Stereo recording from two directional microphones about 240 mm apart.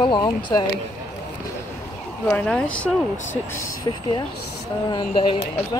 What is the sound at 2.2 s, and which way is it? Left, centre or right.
Speech, centre.